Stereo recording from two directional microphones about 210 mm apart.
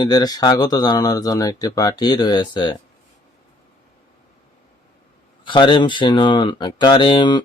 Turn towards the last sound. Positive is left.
turn(degrees=20)  # may be behind; listen again after turning